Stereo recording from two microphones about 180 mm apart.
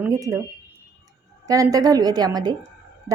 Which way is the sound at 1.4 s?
20° right (ahead or behind).